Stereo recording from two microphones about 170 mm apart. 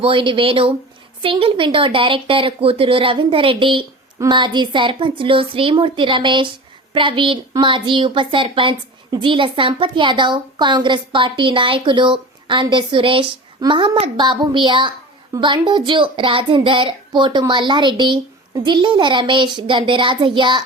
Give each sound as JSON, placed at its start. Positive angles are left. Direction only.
{"t": 0.0, "sound": "a woman's voice", "side_deg": -30}